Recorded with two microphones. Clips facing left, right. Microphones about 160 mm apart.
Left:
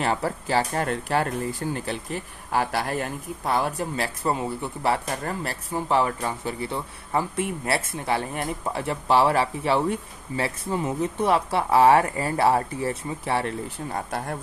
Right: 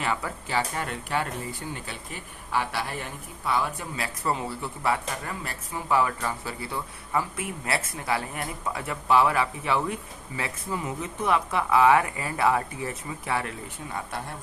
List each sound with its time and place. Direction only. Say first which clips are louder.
0.0 s speech: left 5 dB; 35° left (ahead or behind)
5.2 s speech: left 5 dB; 40° left (ahead or behind)
13.9 s speech: left 4 dB; 45° left (ahead or behind)